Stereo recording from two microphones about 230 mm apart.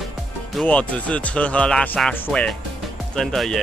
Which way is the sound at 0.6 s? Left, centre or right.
Centre.